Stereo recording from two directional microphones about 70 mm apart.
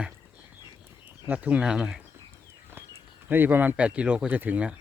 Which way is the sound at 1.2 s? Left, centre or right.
Centre.